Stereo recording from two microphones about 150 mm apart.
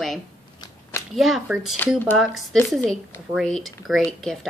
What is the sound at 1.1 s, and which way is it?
Speech, centre (ahead or behind).